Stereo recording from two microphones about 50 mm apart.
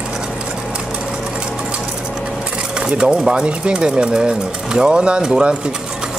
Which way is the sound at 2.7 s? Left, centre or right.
Right.